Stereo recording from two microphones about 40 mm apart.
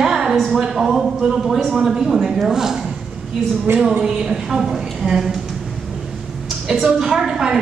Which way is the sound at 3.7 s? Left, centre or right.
Right.